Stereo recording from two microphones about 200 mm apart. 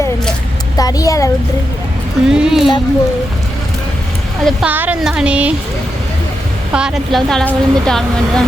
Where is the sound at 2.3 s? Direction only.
5° right (ahead or behind).